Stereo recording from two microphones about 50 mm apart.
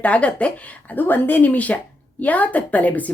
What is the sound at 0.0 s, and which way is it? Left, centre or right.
Speech, left.